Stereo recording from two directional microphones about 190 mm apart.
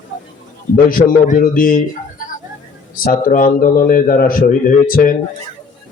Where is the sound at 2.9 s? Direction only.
45° left (ahead or behind).